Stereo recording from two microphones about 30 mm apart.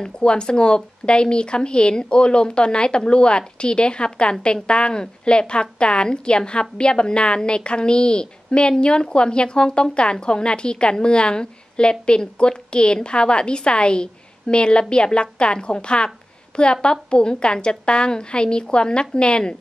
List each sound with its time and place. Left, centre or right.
0.0 s a woman's voice: left
16.7 s a woman's voice: left